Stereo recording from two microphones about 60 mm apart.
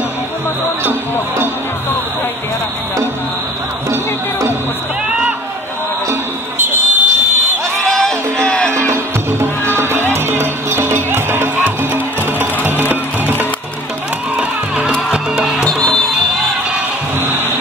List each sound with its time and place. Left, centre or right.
3.9 s music: right
6.6 s buzzer: right
7.8 s music: centre
8.5 s music: left
8.7 s music: right
15.0 s music: centre
17.2 s music: right